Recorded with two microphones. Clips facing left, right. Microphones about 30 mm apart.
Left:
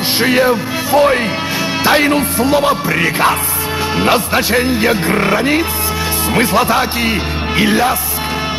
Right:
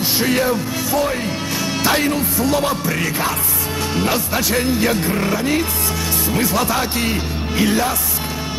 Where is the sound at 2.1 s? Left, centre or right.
Left.